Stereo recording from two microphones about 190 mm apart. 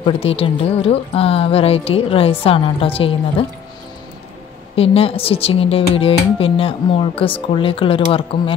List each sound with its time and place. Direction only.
0.0 s speech: 30° left (ahead or behind)
4.7 s speech: 30° left (ahead or behind)